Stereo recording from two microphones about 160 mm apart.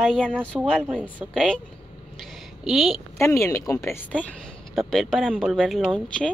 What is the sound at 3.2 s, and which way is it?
Speech, 20° left (ahead or behind).